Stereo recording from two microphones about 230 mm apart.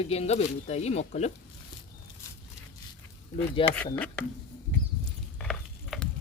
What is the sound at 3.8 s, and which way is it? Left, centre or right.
Speech, centre.